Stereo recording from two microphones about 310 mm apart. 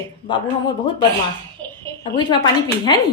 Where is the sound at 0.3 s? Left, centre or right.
Centre.